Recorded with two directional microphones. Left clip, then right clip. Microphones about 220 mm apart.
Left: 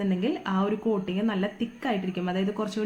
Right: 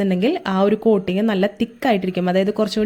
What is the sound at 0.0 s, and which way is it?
Speech, 45° right (ahead or behind).